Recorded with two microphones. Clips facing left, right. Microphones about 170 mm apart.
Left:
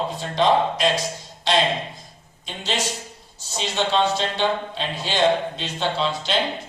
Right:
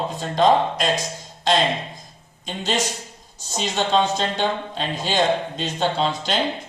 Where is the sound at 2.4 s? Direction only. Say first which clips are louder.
Right 3 dB; 45° right (ahead or behind).